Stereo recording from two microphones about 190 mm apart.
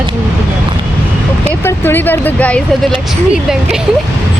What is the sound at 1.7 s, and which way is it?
Speech, 10° left (ahead or behind).